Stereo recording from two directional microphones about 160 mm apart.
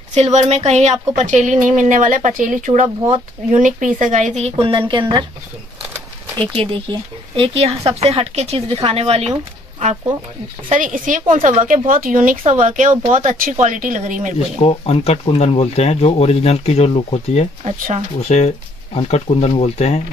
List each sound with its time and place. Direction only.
0.1 s a woman's voice: 45° right (ahead or behind)
6.3 s speech: 35° right (ahead or behind)
10.7 s a woman's voice: 55° right (ahead or behind)
14.6 s speech: 40° left (ahead or behind)
17.6 s a woman's voice: 45° right (ahead or behind)
18.3 s speech: 45° left (ahead or behind)